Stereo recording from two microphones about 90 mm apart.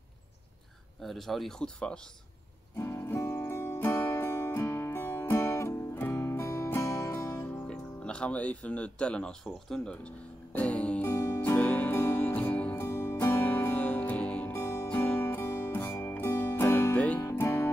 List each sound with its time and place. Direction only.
1.0 s speech: centre (ahead or behind)
2.8 s music: 30° left (ahead or behind)
7.7 s speech: 10° left (ahead or behind)
10.5 s music: 15° left (ahead or behind)
12.7 s music: 30° left (ahead or behind)
14.5 s music: 30° left (ahead or behind)
17.2 s music: 30° left (ahead or behind)